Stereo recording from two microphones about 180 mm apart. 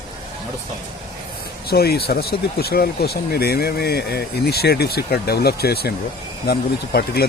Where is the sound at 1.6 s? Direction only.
60° left (ahead or behind).